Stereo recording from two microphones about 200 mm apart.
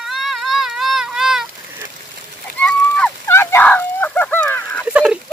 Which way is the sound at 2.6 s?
5° left (ahead or behind).